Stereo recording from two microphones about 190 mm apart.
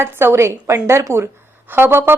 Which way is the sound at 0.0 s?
10° right (ahead or behind).